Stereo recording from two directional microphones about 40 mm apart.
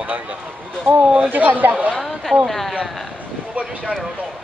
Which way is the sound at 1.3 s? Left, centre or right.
Right.